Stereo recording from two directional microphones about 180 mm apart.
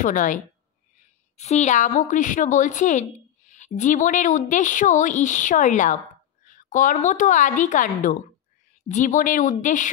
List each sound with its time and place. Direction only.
0.0 s a woman's voice: 45° left (ahead or behind)